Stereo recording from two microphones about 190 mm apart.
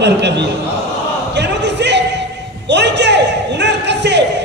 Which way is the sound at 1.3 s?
65° right (ahead or behind).